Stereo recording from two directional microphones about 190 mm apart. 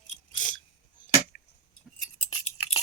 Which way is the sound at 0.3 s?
45° left (ahead or behind).